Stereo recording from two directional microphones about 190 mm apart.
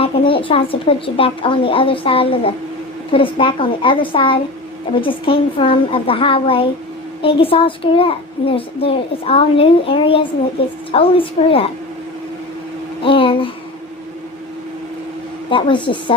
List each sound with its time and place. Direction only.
0.0 s a child's voice: 30° left (ahead or behind)
13.0 s a sound: 30° left (ahead or behind)
15.4 s a child's voice: 25° left (ahead or behind)